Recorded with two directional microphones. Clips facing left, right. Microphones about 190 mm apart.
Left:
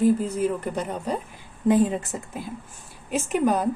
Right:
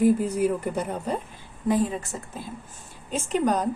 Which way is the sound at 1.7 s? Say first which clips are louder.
Left 4 dB; 20° left (ahead or behind).